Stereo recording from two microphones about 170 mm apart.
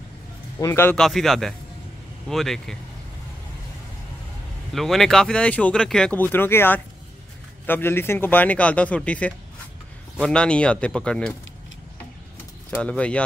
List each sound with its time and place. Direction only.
0.6 s speech: 15° left (ahead or behind)
0.9 s speech: centre (ahead or behind)
4.7 s speech: centre (ahead or behind)
12.7 s speech: 5° left (ahead or behind)